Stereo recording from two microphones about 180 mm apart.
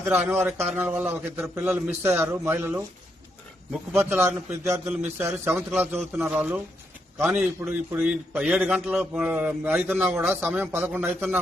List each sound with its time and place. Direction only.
0.1 s a man's voice: 10° right (ahead or behind)